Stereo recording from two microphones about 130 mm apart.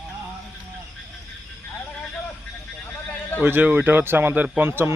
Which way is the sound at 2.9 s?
15° left (ahead or behind).